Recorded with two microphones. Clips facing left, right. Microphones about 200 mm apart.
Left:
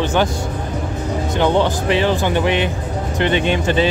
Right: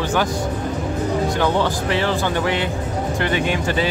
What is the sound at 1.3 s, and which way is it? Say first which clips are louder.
Speech: left 3 dB; 20° left (ahead or behind).